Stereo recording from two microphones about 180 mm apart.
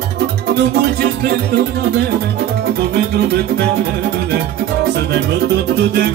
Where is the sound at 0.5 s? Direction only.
65° right (ahead or behind).